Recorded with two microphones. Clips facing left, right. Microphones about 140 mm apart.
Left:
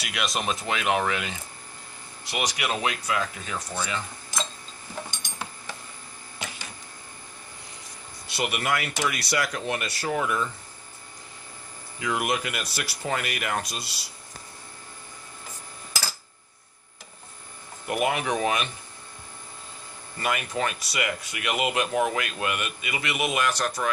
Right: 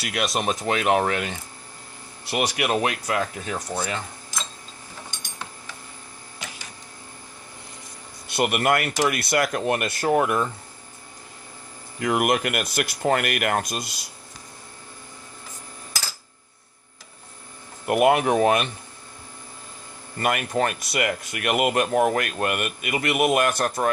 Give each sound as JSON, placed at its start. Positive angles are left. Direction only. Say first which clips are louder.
{"t": 0.0, "sound": "speech", "louder": "right 4 dB", "side_deg": -45}
{"t": 2.3, "sound": "speech", "louder": "right 5 dB", "side_deg": -60}
{"t": 8.3, "sound": "speech", "louder": "right 6 dB", "side_deg": -55}
{"t": 11.9, "sound": "speech", "louder": "right 5 dB", "side_deg": -55}
{"t": 17.8, "sound": "speech", "louder": "right 7 dB", "side_deg": -55}
{"t": 20.1, "sound": "speech", "louder": "right 5 dB", "side_deg": -50}